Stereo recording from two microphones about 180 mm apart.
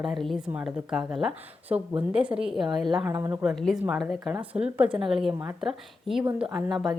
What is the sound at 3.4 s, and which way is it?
Speech, centre (ahead or behind).